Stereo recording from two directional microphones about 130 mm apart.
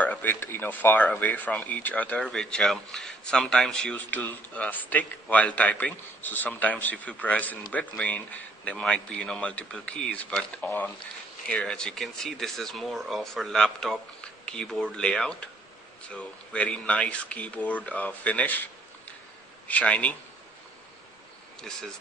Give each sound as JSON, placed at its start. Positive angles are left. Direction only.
{"t": 0.0, "sound": "speech", "side_deg": 15}
{"t": 21.5, "sound": "speech", "side_deg": 5}